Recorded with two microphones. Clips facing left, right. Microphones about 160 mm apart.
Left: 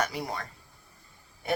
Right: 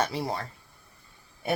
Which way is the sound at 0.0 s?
30° right (ahead or behind).